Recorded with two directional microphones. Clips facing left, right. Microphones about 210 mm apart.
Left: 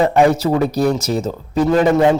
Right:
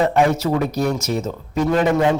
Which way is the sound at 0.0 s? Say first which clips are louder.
Left 3 dB; 30° left (ahead or behind).